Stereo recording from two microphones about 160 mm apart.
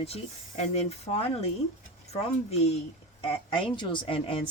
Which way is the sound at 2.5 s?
40° left (ahead or behind).